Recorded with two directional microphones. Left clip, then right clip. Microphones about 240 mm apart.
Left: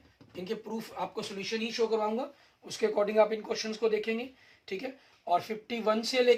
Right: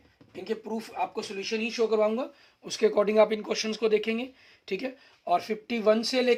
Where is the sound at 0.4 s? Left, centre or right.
Right.